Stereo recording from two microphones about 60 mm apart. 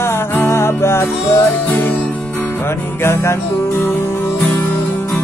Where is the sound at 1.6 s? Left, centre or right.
Left.